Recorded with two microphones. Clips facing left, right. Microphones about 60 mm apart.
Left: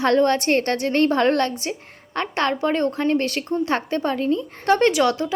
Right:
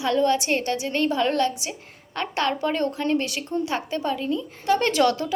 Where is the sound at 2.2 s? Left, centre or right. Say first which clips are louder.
Left 3 dB; left.